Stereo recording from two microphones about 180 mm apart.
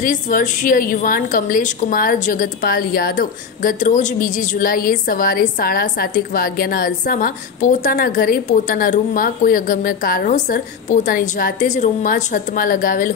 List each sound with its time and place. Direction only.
0.0 s a woman's voice: 50° left (ahead or behind)